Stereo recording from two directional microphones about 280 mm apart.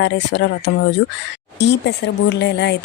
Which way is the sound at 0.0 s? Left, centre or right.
Left.